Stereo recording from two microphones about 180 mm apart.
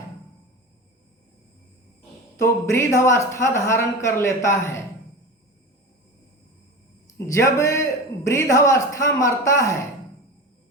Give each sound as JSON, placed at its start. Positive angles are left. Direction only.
{"t": 2.4, "sound": "speech", "side_deg": 15}
{"t": 7.3, "sound": "speech", "side_deg": 15}